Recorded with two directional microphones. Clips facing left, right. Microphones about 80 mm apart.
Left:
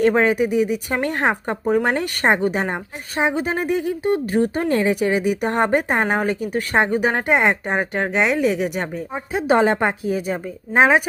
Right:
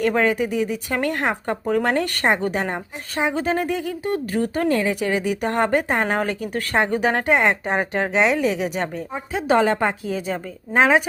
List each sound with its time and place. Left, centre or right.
0.0 s a woman's voice: left
7.6 s a woman's voice: centre